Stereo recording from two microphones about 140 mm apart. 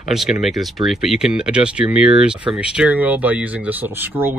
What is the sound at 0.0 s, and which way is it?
Speech, 5° right (ahead or behind).